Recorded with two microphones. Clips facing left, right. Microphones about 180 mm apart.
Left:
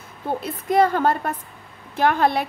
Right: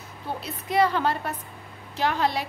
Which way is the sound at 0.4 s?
50° left (ahead or behind).